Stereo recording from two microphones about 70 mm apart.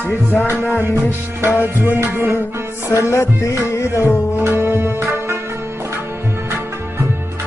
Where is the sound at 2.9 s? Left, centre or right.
Left.